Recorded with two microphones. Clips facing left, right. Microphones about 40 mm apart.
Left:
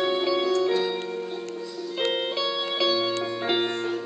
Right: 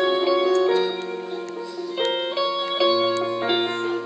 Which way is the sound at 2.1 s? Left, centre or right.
Centre.